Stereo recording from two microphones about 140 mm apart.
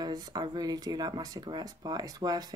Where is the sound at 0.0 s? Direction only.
30° right (ahead or behind).